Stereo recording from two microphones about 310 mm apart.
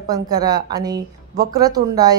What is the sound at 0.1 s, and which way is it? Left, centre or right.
Speech, centre.